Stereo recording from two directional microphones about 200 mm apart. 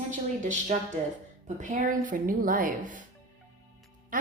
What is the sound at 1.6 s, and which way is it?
A woman's voice, 40° right (ahead or behind).